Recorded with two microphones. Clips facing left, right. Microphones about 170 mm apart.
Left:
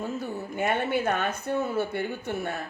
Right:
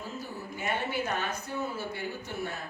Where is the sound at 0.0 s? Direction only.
55° left (ahead or behind).